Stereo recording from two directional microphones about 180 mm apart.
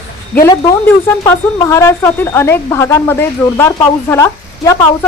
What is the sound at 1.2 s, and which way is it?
A woman's voice, 15° left (ahead or behind).